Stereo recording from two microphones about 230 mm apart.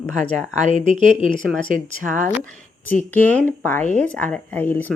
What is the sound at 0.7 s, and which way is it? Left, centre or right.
Speech, left.